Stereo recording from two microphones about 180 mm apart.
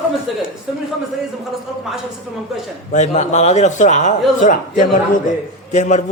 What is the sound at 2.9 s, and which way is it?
A man's voice, 40° left (ahead or behind).